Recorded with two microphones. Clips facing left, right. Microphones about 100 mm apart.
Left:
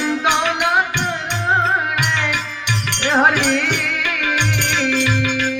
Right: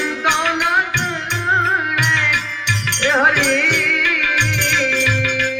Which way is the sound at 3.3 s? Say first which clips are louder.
Right 1 dB; 30° left (ahead or behind).